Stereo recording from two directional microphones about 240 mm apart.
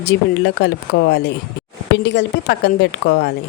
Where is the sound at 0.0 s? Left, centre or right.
Left.